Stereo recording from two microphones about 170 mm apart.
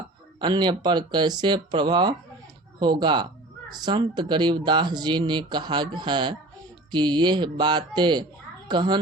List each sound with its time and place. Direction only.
0.3 s speech: 25° right (ahead or behind)